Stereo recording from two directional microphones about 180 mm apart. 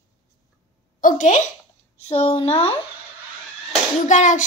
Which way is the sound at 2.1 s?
35° left (ahead or behind).